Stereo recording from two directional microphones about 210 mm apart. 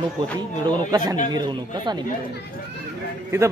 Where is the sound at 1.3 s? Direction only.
20° right (ahead or behind).